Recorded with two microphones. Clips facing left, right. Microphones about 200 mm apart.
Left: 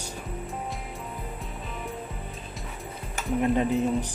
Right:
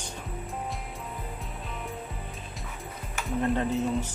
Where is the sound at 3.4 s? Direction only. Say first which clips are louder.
Left 3 dB; 15° left (ahead or behind).